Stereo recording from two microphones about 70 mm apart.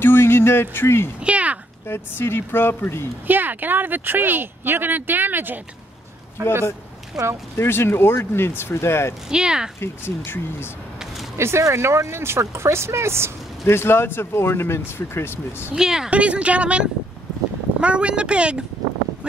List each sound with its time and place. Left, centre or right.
0.0 s a sound: left
1.2 s a sound: centre
1.9 s speech: left
3.3 s speech: right
7.2 s speech: centre
7.5 s speech: left
9.3 s speech: centre
9.8 s speech: left
11.3 s speech: right
13.7 s speech: left
15.7 s speech: centre